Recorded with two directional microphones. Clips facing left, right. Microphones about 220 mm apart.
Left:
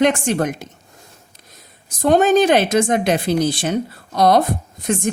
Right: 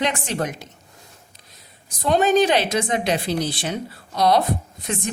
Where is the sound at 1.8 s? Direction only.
50° left (ahead or behind).